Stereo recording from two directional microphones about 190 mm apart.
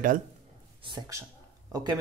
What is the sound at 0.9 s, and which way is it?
Speech, 20° right (ahead or behind).